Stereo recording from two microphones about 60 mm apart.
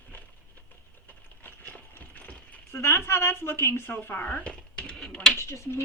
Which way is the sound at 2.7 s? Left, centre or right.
Left.